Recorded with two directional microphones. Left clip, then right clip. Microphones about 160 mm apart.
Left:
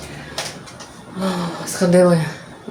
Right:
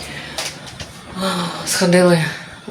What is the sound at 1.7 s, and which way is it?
Speech, 10° left (ahead or behind).